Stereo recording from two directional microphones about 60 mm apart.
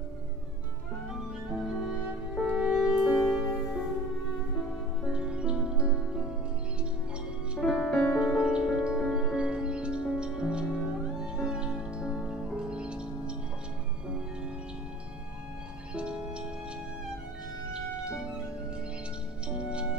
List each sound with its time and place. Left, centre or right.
1.1 s music: centre
5.0 s music: centre
7.8 s music: centre
8.2 s music: centre
15.9 s music: centre
17.6 s music: centre